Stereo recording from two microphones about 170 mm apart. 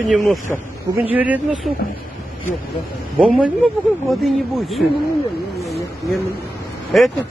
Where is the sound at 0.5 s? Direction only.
Centre (ahead or behind).